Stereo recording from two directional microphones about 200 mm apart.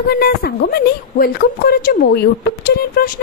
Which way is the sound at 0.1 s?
50° left (ahead or behind).